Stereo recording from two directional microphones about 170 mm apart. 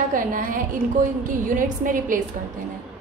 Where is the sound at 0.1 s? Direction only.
55° right (ahead or behind).